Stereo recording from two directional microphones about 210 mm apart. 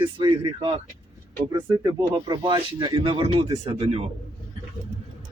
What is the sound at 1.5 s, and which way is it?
Speech, 20° right (ahead or behind).